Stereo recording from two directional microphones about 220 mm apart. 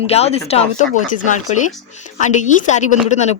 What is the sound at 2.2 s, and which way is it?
Speech, 35° left (ahead or behind).